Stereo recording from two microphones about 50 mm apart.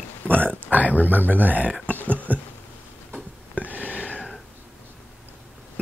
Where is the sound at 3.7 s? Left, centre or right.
Right.